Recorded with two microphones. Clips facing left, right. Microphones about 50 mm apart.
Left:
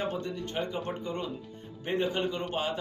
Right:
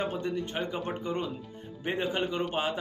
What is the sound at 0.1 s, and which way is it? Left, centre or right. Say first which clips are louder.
Speech: right 2 dB; centre.